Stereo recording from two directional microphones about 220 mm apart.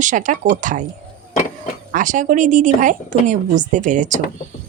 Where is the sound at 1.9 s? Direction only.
35° right (ahead or behind).